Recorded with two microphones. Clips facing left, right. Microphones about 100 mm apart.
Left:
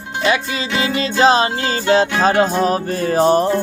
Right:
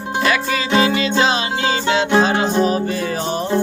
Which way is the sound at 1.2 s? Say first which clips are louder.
Left 8 dB; 35° left (ahead or behind).